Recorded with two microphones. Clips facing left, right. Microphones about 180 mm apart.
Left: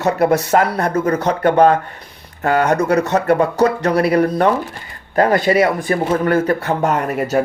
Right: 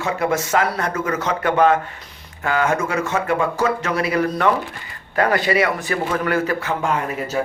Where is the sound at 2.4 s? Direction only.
40° left (ahead or behind).